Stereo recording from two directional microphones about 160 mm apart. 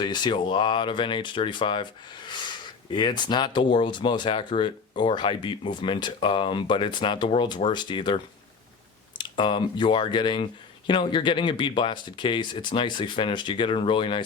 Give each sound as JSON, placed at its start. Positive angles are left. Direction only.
{"t": 0.0, "sound": "speech", "side_deg": 30}